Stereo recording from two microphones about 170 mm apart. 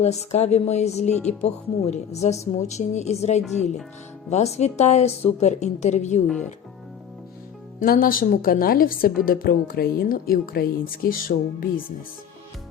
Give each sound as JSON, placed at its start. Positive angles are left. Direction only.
{"t": 0.0, "sound": "a woman's voice", "side_deg": 40}
{"t": 6.2, "sound": "speech", "side_deg": 0}
{"t": 7.8, "sound": "a woman's voice", "side_deg": 55}